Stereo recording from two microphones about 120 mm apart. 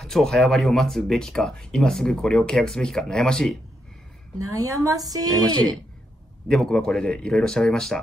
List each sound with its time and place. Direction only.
0.0 s speech: 5° left (ahead or behind)
4.6 s a woman's voice: 25° right (ahead or behind)
6.5 s speech: 5° left (ahead or behind)